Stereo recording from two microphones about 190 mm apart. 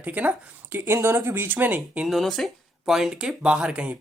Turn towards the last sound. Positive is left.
turn(degrees=-5)  # may be behind; listen again after turning